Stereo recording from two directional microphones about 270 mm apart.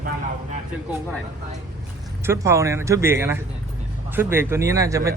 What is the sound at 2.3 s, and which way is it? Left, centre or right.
Speech, centre.